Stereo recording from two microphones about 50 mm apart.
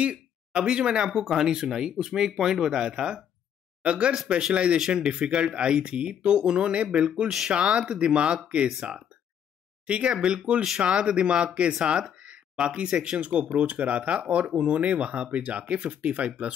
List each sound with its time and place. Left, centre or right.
0.0 s speech: right
9.8 s speech: right